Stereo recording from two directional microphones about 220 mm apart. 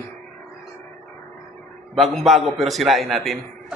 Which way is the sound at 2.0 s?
Centre (ahead or behind).